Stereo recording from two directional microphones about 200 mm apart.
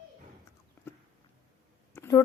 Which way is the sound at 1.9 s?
15° left (ahead or behind).